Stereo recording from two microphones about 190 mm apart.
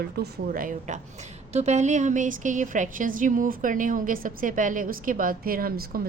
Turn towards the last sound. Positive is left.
turn(degrees=-50)  # may be behind; listen again after turning